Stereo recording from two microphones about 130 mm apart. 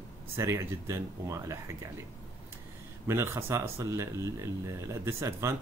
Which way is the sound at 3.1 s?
20° right (ahead or behind).